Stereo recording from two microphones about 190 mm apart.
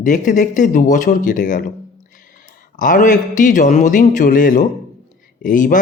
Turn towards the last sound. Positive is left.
turn(degrees=45)  # may be behind; listen again after turning